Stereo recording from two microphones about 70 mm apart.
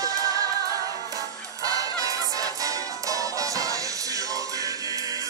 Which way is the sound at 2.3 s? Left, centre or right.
Right.